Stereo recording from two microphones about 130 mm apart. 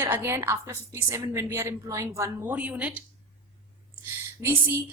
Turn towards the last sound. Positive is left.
turn(degrees=-15)  # may be behind; listen again after turning